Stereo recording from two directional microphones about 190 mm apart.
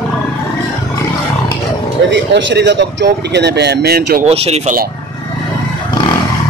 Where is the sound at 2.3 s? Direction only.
65° right (ahead or behind).